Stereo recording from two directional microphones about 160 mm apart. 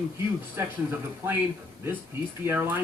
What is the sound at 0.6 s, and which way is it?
Speech, 15° right (ahead or behind).